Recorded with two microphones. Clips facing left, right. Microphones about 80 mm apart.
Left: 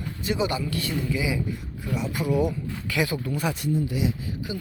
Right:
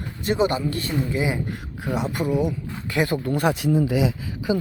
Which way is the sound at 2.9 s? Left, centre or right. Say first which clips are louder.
Right 4 dB; right.